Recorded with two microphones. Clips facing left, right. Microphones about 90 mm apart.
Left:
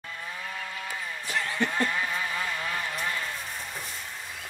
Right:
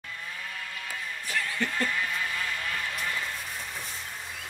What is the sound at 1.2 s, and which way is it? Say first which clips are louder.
Vehicle: left 2 dB; 20° left (ahead or behind).